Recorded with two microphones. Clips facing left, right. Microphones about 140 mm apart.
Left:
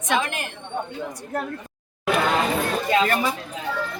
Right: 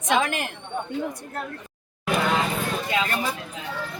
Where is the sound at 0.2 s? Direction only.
90° right.